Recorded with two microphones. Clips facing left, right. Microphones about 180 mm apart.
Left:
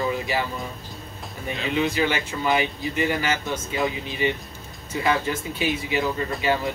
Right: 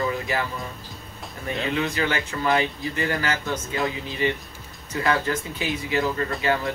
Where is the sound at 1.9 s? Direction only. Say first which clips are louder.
Left 1 dB; 20° left (ahead or behind).